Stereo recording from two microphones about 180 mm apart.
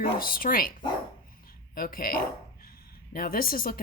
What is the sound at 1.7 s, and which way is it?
A woman's voice, 55° left (ahead or behind).